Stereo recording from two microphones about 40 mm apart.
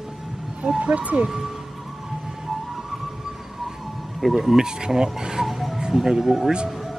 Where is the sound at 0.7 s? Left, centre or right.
Right.